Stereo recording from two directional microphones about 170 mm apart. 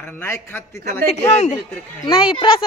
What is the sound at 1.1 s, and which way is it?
Speech, 40° left (ahead or behind).